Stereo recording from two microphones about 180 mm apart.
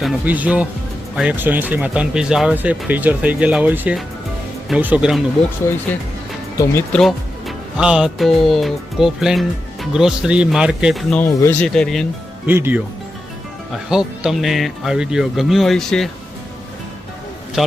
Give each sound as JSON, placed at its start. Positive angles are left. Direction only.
{"t": 0.0, "sound": "speech", "side_deg": -5}
{"t": 5.7, "sound": "speech", "side_deg": 15}
{"t": 6.9, "sound": "speech", "side_deg": 0}
{"t": 11.2, "sound": "speech", "side_deg": 15}
{"t": 11.6, "sound": "speech", "side_deg": 5}
{"t": 12.5, "sound": "speech", "side_deg": -10}
{"t": 13.9, "sound": "speech", "side_deg": -5}
{"t": 17.6, "sound": "speech", "side_deg": 0}